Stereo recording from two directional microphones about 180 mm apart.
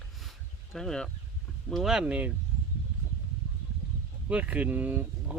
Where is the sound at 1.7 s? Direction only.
Centre (ahead or behind).